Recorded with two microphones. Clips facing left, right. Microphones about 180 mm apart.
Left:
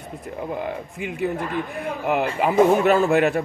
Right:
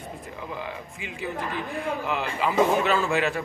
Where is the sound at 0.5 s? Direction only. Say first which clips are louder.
Left 6 dB; 55° left (ahead or behind).